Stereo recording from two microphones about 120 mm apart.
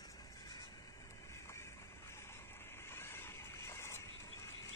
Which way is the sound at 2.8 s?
20° left (ahead or behind).